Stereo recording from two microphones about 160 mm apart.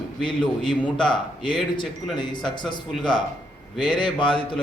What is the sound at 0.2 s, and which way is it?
A man's voice, 30° left (ahead or behind).